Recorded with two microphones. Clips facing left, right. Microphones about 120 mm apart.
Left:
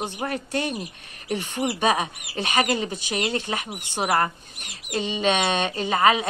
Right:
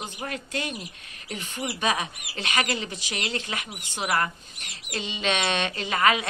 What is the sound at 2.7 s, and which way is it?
Speech, 40° left (ahead or behind).